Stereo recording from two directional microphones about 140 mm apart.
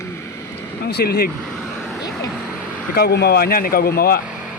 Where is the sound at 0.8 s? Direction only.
90° left.